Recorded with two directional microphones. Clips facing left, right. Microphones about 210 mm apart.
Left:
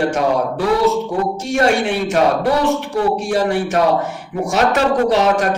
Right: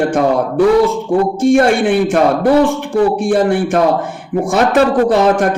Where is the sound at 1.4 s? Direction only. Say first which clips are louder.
Right 6 dB; 50° right (ahead or behind).